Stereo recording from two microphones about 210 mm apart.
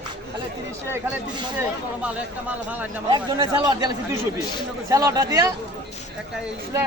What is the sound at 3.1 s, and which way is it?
Speech, 20° right (ahead or behind).